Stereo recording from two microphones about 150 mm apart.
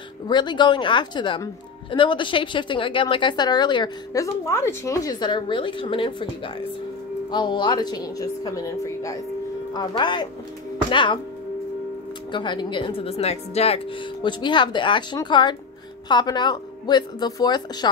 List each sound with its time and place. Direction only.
0.3 s a woman's voice: 30° left (ahead or behind)
12.3 s a woman's voice: 30° left (ahead or behind)